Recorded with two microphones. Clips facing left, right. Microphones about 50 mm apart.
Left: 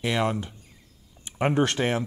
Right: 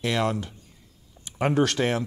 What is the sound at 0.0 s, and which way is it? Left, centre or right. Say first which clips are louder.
Speech: even; centre.